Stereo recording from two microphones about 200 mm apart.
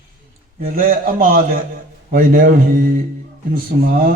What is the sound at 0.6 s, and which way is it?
A man's voice, 45° right (ahead or behind).